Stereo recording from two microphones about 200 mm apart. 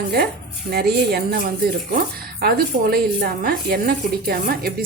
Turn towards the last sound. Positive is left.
turn(degrees=-45)  # may be behind; listen again after turning